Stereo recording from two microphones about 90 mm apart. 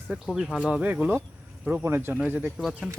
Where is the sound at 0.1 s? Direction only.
5° right (ahead or behind).